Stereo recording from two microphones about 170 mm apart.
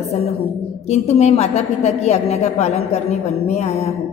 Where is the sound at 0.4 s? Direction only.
40° left (ahead or behind).